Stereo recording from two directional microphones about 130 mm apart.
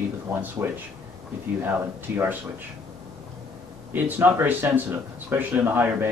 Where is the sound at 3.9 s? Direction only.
15° right (ahead or behind).